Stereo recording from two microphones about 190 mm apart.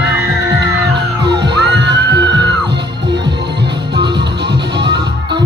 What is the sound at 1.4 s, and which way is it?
Music, 65° right (ahead or behind).